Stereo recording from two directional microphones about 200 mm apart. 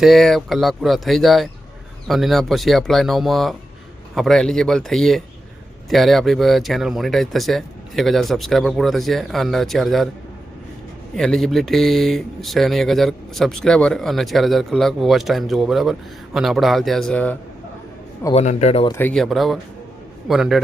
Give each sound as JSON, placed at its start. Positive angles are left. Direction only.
{"t": 0.0, "sound": "speech", "side_deg": 0}
{"t": 11.1, "sound": "speech", "side_deg": 0}
{"t": 18.3, "sound": "speech", "side_deg": 35}
{"t": 18.9, "sound": "speech", "side_deg": 10}